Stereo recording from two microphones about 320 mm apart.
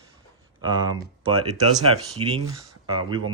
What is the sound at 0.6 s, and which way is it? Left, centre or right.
Speech, centre.